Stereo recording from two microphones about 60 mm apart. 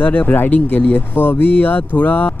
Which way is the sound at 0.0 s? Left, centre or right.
Left.